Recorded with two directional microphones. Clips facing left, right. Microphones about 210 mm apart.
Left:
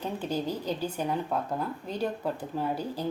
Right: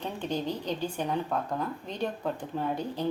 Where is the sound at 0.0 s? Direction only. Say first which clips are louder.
Left 1 dB; 5° left (ahead or behind).